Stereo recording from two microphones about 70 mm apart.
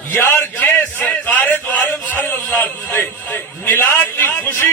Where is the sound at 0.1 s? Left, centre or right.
Left.